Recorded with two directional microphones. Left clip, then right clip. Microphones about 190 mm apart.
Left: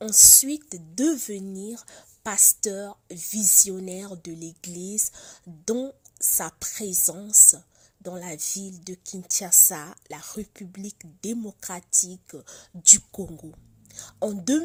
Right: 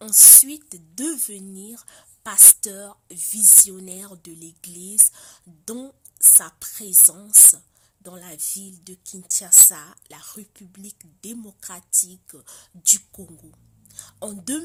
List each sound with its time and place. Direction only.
0.1 s a woman's voice: 25° left (ahead or behind)